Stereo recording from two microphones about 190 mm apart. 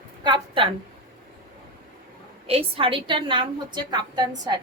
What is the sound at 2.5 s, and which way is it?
A woman's voice, 30° right (ahead or behind).